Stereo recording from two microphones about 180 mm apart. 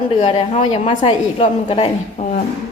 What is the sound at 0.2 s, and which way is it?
A woman's voice, 35° left (ahead or behind).